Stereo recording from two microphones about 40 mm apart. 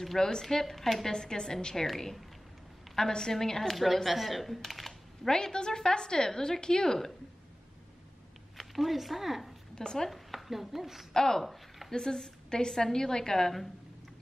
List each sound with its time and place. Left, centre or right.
0.0 s a woman's voice: centre
1.1 s a woman's voice: centre
3.7 s speech: centre
5.3 s a woman's voice: centre
8.5 s speech: centre
9.8 s speech: centre
10.0 s a woman's voice: centre
11.1 s a woman's voice: centre